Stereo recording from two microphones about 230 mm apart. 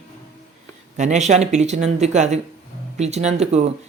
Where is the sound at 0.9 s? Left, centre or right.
Right.